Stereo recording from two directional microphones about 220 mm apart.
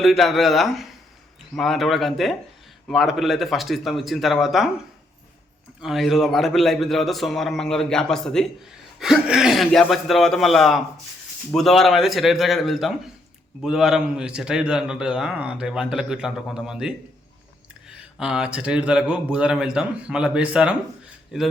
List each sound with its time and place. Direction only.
0.0 s a man's voice: centre (ahead or behind)
5.8 s a man's voice: centre (ahead or behind)
18.2 s a man's voice: 5° right (ahead or behind)